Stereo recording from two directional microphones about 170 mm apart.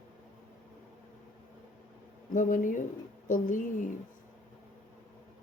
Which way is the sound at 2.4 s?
50° left (ahead or behind).